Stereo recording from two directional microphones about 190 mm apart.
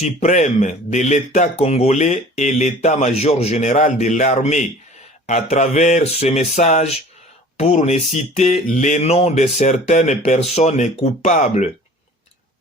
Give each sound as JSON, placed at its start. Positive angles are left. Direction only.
{"t": 0.0, "sound": "speech", "side_deg": 35}